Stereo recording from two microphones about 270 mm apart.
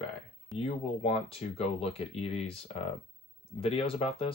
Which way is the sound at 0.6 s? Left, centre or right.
Left.